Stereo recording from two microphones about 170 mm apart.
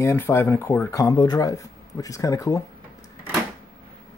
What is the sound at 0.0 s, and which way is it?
Speech, 15° left (ahead or behind).